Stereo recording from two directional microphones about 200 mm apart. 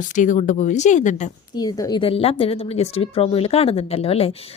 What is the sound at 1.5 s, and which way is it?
Speech, 20° left (ahead or behind).